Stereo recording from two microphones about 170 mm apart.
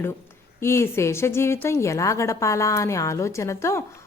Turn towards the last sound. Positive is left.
turn(degrees=15)  # may be behind; listen again after turning